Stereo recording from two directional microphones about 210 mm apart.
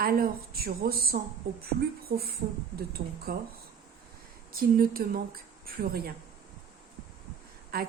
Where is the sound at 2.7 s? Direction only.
50° right (ahead or behind).